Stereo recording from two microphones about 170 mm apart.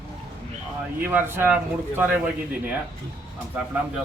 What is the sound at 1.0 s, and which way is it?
A man's voice, 10° right (ahead or behind).